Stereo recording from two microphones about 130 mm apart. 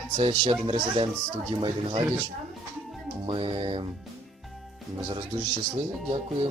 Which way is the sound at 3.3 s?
40° right (ahead or behind).